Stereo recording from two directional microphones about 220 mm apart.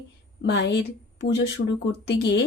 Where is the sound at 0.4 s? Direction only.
50° left (ahead or behind).